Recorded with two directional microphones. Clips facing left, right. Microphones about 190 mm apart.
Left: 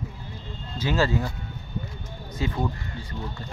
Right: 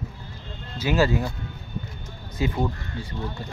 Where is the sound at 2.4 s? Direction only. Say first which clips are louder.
Right 3 dB; 15° right (ahead or behind).